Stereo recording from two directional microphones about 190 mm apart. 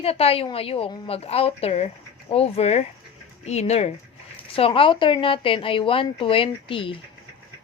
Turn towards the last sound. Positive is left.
turn(degrees=25)  # may be behind; listen again after turning